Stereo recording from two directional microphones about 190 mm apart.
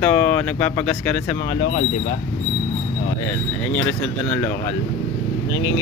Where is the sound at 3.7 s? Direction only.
5° left (ahead or behind).